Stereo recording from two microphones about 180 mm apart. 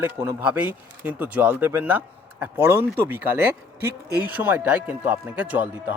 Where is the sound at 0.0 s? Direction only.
15° right (ahead or behind).